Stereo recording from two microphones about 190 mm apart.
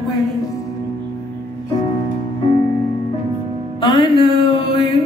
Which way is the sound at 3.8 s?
25° left (ahead or behind).